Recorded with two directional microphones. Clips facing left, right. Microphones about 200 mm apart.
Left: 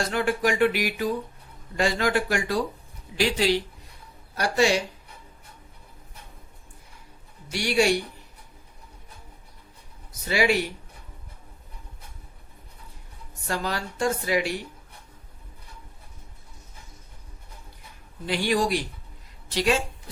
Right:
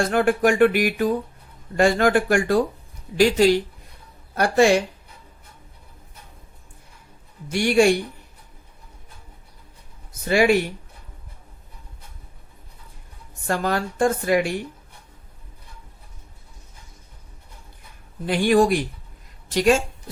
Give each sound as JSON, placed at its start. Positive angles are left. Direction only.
{"t": 0.1, "sound": "speech", "side_deg": -50}
{"t": 7.4, "sound": "speech", "side_deg": -50}
{"t": 10.2, "sound": "speech", "side_deg": -50}
{"t": 13.5, "sound": "speech", "side_deg": -50}
{"t": 18.3, "sound": "speech", "side_deg": -50}